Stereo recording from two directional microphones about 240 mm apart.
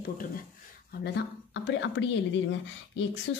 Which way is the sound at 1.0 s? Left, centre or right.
Left.